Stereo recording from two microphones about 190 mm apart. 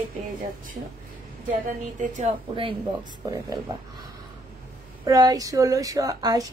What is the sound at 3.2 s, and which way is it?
Speech, 20° right (ahead or behind).